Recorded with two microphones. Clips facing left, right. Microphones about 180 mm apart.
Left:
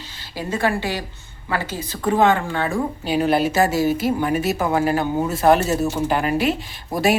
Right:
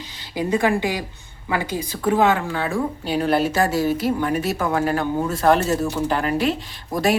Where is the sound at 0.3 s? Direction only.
15° right (ahead or behind).